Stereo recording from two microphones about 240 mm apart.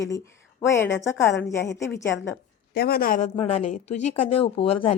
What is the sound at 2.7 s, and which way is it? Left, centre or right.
A woman's voice, left.